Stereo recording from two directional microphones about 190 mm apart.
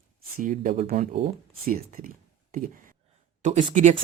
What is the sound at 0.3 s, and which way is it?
Speech, 45° right (ahead or behind).